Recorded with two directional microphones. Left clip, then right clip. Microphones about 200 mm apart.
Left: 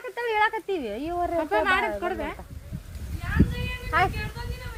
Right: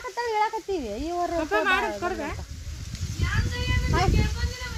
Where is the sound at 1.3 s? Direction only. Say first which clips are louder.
Left 1 dB; 25° right (ahead or behind).